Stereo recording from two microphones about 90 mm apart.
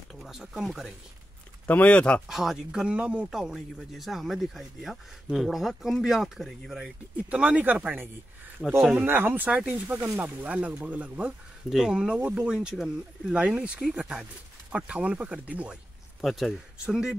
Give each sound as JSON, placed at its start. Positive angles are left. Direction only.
{"t": 0.1, "sound": "speech", "side_deg": -5}
{"t": 1.7, "sound": "speech", "side_deg": 15}
{"t": 2.2, "sound": "speech", "side_deg": -5}
{"t": 8.6, "sound": "speech", "side_deg": 5}
{"t": 8.9, "sound": "speech", "side_deg": -25}
{"t": 16.2, "sound": "speech", "side_deg": 0}